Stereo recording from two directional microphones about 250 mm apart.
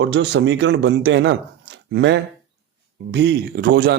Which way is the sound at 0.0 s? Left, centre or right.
Right.